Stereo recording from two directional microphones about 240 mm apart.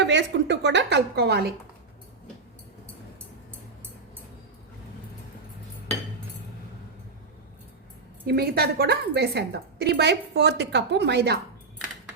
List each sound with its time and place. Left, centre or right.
0.0 s a woman's voice: right
8.3 s a woman's voice: right